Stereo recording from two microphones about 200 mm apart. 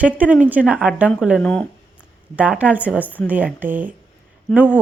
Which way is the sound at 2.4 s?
5° right (ahead or behind).